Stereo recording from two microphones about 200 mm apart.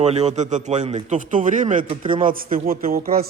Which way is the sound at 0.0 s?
35° right (ahead or behind).